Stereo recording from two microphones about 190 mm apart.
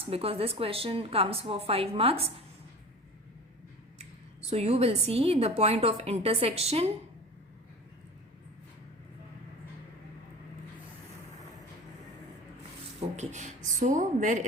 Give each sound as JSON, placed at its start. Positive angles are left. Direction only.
{"t": 0.0, "sound": "a woman's voice", "side_deg": -30}
{"t": 4.4, "sound": "a woman's voice", "side_deg": -30}
{"t": 13.1, "sound": "speech", "side_deg": -40}